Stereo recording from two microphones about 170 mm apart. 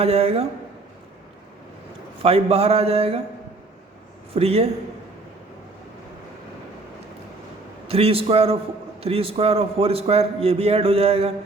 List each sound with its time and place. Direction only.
0.0 s a man's voice: 35° right (ahead or behind)
2.2 s a man's voice: 35° right (ahead or behind)
4.4 s a man's voice: 35° right (ahead or behind)
7.9 s a man's voice: 35° right (ahead or behind)